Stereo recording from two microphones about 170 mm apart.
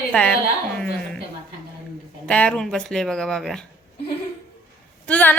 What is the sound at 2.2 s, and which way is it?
Speech, 5° left (ahead or behind).